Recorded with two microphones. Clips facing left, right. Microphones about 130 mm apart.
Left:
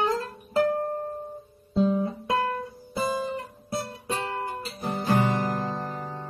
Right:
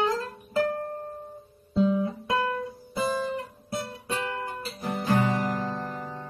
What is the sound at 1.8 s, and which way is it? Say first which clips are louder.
Guitar: even; 35° left (ahead or behind).